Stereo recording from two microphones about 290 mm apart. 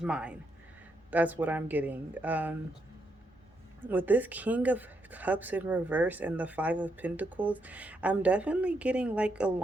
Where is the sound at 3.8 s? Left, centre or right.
Centre.